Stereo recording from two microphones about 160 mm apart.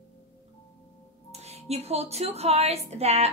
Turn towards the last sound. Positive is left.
turn(degrees=-40)  # may be behind; listen again after turning